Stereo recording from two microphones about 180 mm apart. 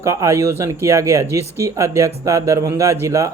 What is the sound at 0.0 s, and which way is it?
Speech, 15° right (ahead or behind).